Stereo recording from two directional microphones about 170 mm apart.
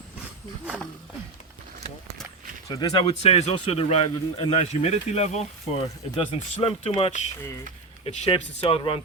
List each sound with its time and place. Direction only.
2.6 s speech: 20° left (ahead or behind)
3.2 s speech: 35° left (ahead or behind)